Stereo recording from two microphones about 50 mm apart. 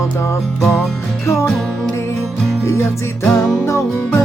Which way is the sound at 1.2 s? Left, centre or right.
Left.